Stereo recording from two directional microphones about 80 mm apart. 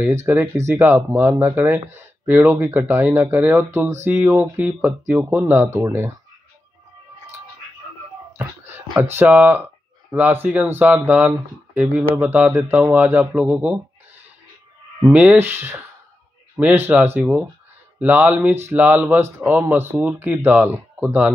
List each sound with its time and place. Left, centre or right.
0.0 s speech: right
2.4 s speech: right
2.7 s speech: right
8.9 s speech: right
9.2 s speech: centre
15.3 s speech: right